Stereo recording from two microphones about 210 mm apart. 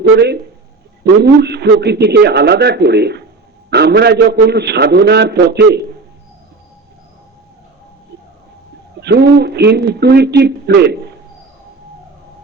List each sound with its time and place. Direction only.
0.0 s a man's voice: 50° right (ahead or behind)
9.0 s a man's voice: 50° right (ahead or behind)